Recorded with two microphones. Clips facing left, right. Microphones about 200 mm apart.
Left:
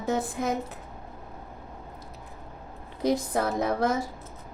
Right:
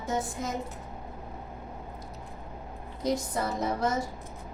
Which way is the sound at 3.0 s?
60° left (ahead or behind).